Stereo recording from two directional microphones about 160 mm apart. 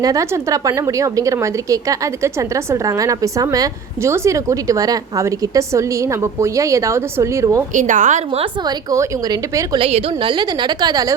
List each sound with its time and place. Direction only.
0.0 s a woman's voice: 20° right (ahead or behind)
7.7 s a woman's voice: 50° right (ahead or behind)
8.6 s a woman's voice: 20° right (ahead or behind)
9.7 s a woman's voice: 35° right (ahead or behind)